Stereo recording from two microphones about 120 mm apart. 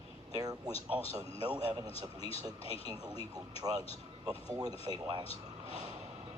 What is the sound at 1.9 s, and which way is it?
Speech, 55° left (ahead or behind).